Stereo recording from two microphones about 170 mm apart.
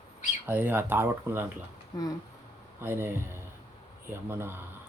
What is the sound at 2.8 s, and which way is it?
Speech, 15° right (ahead or behind).